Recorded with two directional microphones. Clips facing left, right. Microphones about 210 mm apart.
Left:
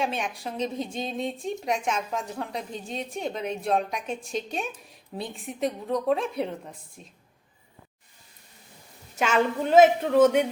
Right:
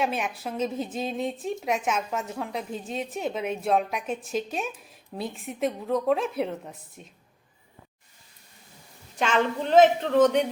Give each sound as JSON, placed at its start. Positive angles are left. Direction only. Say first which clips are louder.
{"t": 0.0, "sound": "a woman's voice", "louder": "right 1 dB", "side_deg": 0}
{"t": 9.1, "sound": "a woman's voice", "louder": "left 1 dB", "side_deg": 10}